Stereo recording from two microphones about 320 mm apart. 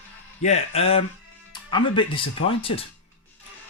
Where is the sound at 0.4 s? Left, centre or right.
Centre.